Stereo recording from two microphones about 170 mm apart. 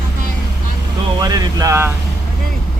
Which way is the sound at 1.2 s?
20° right (ahead or behind).